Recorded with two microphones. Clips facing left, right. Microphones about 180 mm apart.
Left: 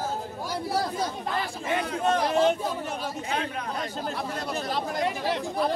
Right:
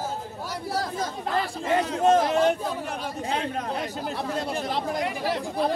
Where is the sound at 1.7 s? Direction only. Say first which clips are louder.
Right 5 dB; 35° right (ahead or behind).